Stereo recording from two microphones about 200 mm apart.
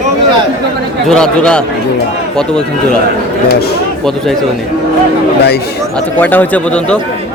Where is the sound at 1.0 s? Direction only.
5° left (ahead or behind).